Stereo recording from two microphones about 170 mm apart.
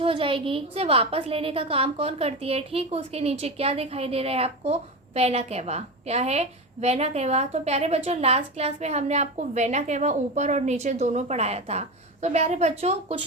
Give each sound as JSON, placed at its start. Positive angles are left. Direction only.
{"t": 0.0, "sound": "a woman's voice", "side_deg": -35}